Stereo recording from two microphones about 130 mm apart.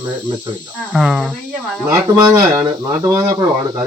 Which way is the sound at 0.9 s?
5° right (ahead or behind).